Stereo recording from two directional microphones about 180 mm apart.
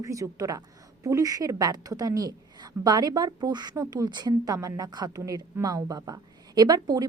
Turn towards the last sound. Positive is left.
turn(degrees=-20)  # may be behind; listen again after turning